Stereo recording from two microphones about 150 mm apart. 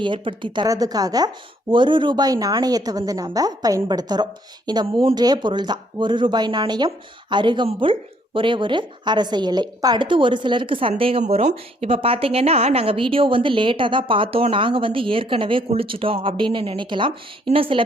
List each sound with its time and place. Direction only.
0.0 s a woman's voice: 35° right (ahead or behind)